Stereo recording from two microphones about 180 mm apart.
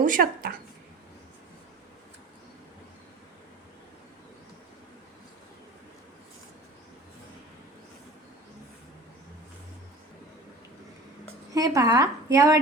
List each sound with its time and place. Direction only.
0.0 s a woman's voice: 50° right (ahead or behind)
11.5 s speech: 20° right (ahead or behind)